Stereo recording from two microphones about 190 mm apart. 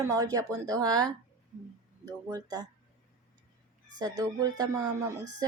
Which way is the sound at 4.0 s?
20° right (ahead or behind).